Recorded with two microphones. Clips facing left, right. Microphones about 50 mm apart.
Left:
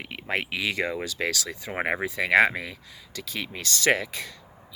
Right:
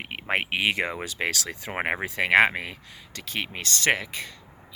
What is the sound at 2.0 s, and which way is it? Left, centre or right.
Speech, right.